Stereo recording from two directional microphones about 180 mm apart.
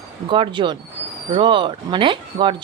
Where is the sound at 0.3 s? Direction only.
30° right (ahead or behind).